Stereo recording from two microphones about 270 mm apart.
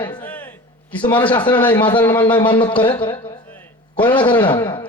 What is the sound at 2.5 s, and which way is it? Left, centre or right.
Speech, centre.